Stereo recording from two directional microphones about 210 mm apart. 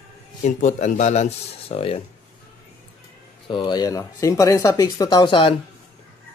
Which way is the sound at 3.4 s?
20° left (ahead or behind).